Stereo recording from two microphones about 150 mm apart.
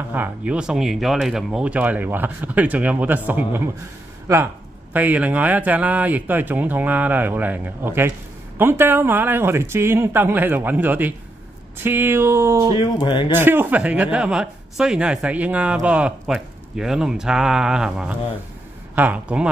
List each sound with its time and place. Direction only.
0.1 s speech: 10° right (ahead or behind)
4.9 s speech: 10° right (ahead or behind)
12.7 s speech: 30° left (ahead or behind)
13.3 s speech: 15° right (ahead or behind)